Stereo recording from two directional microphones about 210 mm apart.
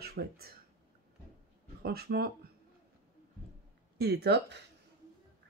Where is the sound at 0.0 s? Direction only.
50° right (ahead or behind).